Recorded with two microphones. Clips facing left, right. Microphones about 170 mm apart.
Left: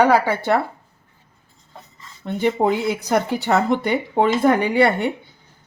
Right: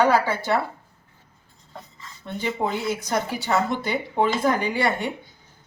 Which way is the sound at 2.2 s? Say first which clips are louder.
Left 7 dB; 60° left (ahead or behind).